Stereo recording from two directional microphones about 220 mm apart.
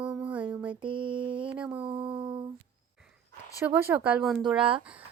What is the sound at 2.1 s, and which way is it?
Humming, 20° right (ahead or behind).